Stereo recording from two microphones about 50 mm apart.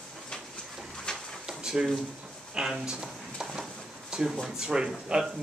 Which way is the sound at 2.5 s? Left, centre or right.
Centre.